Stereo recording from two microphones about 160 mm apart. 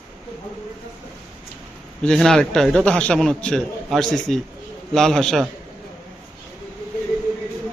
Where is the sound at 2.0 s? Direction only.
5° left (ahead or behind).